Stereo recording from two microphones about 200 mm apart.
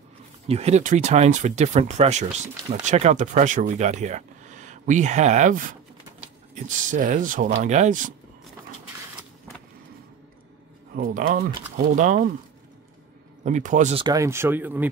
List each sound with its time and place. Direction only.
0.5 s speech: 30° right (ahead or behind)
11.0 s speech: 45° right (ahead or behind)
13.4 s speech: 40° right (ahead or behind)
14.0 s speech: 15° right (ahead or behind)